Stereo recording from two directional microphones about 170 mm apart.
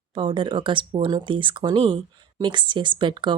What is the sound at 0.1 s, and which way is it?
Speech, 30° right (ahead or behind).